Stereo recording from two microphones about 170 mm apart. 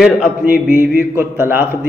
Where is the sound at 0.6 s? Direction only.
10° right (ahead or behind).